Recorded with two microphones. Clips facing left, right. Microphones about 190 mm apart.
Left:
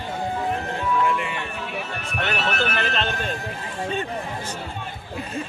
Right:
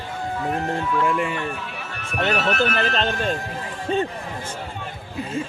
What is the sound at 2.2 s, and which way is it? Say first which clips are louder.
Speech: right 4 dB; 35° right (ahead or behind).